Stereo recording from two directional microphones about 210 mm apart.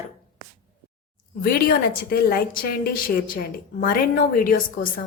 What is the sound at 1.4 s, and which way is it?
A woman's voice, 45° left (ahead or behind).